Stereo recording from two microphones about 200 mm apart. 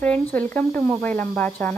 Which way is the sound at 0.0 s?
10° left (ahead or behind).